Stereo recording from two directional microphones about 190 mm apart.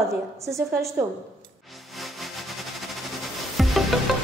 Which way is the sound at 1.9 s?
Centre (ahead or behind).